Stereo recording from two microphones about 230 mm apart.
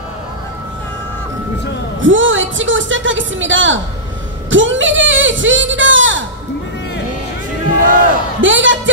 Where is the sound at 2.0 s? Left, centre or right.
Right.